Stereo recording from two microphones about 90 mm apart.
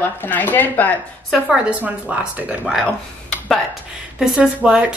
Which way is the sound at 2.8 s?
10° left (ahead or behind).